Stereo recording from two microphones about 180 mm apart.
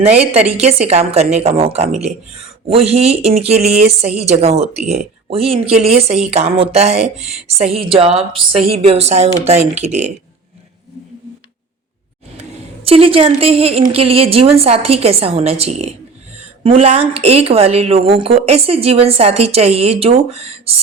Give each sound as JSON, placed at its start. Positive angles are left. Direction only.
{"t": 0.0, "sound": "a woman's voice", "side_deg": -35}
{"t": 12.4, "sound": "a woman's voice", "side_deg": -35}